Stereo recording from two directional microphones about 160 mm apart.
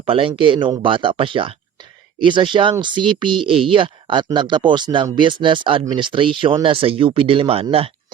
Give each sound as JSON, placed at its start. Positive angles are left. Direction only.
{"t": 0.0, "sound": "speech", "side_deg": -35}